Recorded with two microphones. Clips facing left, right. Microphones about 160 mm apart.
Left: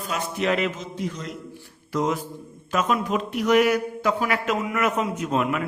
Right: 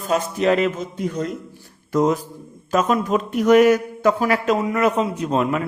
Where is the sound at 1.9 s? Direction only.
45° right (ahead or behind).